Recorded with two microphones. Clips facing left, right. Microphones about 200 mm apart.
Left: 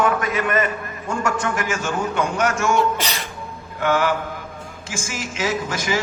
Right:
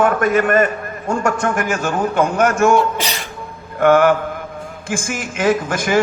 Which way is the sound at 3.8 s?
55° right (ahead or behind).